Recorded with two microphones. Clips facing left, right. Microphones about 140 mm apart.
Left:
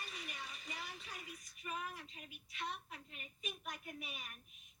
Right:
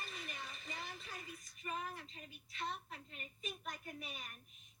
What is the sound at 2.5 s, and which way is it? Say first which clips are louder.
Speech: right 1 dB; 35° right (ahead or behind).